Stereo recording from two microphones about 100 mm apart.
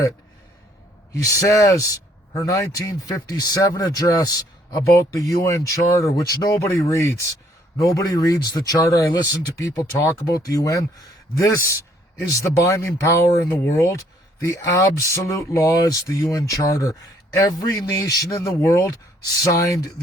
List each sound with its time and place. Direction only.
1.1 s speech: 30° left (ahead or behind)